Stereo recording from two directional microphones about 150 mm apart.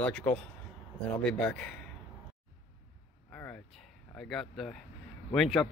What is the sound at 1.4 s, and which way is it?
Speech, 10° left (ahead or behind).